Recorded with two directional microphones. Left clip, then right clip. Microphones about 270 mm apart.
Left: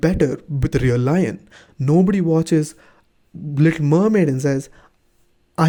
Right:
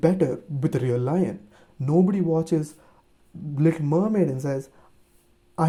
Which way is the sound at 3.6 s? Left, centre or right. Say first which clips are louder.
Left 5 dB; left.